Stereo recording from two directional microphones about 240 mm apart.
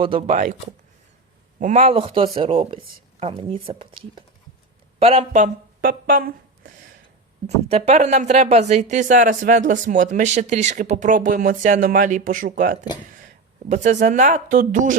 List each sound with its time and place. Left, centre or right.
0.0 s speech: right
1.5 s speech: right